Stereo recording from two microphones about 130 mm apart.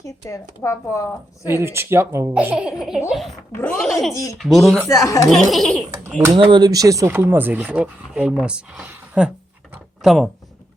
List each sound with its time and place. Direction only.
0.0 s speech: 25° left (ahead or behind)
1.5 s speech: 20° right (ahead or behind); by 3.3 s centre (ahead or behind)
3.5 s speech: 15° left (ahead or behind)
4.4 s speech: centre (ahead or behind)
5.0 s speech: 25° left (ahead or behind)
5.3 s speech: centre (ahead or behind)
6.3 s speech: 35° right (ahead or behind); by 10.2 s 5° right (ahead or behind)